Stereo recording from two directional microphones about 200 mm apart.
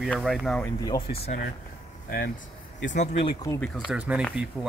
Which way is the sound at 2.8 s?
35° left (ahead or behind).